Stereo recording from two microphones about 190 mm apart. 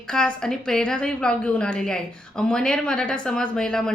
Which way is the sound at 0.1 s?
5° left (ahead or behind).